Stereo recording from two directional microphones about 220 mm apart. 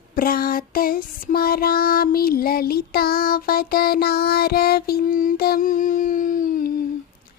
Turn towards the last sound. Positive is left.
turn(degrees=40)  # may be behind; listen again after turning